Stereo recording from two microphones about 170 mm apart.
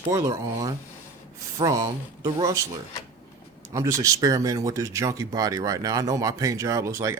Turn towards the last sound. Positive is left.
turn(degrees=-15)  # may be behind; listen again after turning